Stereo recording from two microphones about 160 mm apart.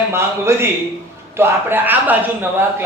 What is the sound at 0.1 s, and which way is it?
Speech, 15° right (ahead or behind).